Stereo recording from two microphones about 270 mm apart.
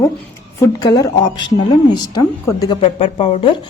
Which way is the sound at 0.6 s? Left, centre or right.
Centre.